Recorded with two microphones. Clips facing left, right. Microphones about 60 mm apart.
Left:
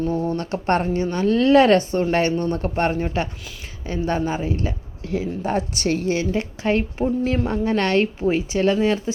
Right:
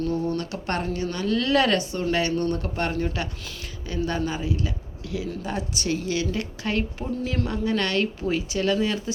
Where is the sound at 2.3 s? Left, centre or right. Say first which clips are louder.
Left 2 dB; left.